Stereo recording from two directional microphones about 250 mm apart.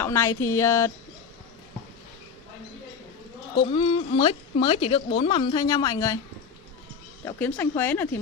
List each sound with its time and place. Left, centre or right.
0.0 s speech: centre
3.7 s speech: left
7.2 s speech: centre